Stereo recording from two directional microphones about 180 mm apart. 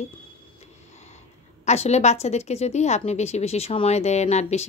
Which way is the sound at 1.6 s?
35° left (ahead or behind).